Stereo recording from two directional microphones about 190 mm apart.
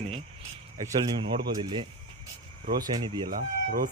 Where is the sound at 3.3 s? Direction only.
50° right (ahead or behind).